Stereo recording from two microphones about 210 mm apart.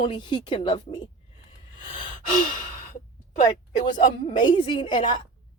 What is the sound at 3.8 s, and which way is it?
Speech, 25° left (ahead or behind).